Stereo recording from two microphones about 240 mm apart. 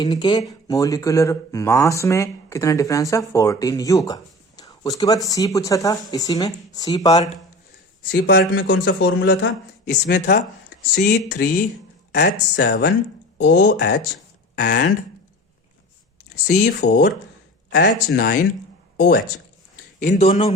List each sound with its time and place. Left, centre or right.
0.0 s speech: centre
8.1 s speech: left
9.9 s speech: left
16.3 s speech: left
20.0 s a man's voice: left